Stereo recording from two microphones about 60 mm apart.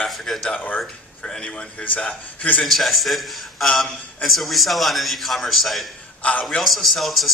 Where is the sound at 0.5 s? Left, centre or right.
Left.